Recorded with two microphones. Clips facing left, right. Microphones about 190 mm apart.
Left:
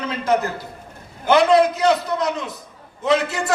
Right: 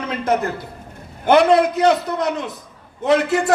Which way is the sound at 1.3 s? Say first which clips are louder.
Right 1 dB; 55° right (ahead or behind).